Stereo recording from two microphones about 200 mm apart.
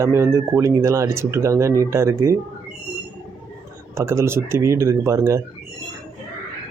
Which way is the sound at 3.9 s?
15° right (ahead or behind).